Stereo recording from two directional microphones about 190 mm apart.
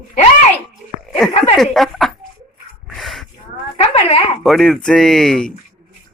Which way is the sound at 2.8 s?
Centre (ahead or behind).